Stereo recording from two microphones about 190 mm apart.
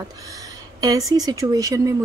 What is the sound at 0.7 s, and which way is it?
A woman's voice, 20° right (ahead or behind).